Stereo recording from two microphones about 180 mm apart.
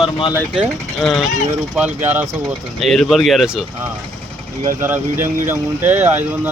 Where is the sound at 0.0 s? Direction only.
25° left (ahead or behind).